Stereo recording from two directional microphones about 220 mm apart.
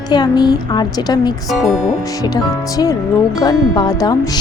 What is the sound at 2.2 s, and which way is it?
Speech, 15° left (ahead or behind).